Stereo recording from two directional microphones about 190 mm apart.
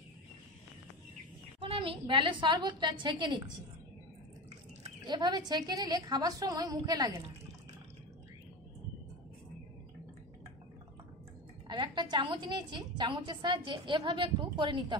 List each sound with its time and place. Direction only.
1.6 s a woman's voice: 30° right (ahead or behind)
5.0 s a woman's voice: 25° right (ahead or behind)
11.6 s a woman's voice: 25° right (ahead or behind)